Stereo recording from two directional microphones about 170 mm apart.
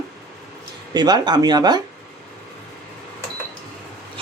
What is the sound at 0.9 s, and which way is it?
Speech, 25° right (ahead or behind).